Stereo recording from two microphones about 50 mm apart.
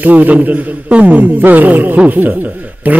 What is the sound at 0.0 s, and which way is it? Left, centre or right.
A man's voice, right.